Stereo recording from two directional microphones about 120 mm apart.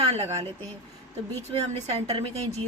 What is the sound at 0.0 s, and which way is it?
Speech, 60° right (ahead or behind).